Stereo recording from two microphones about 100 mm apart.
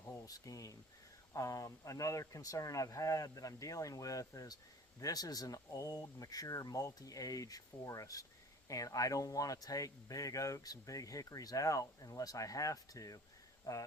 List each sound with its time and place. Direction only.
0.3 s speech: 35° left (ahead or behind)